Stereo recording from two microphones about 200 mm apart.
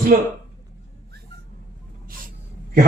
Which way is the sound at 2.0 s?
45° right (ahead or behind).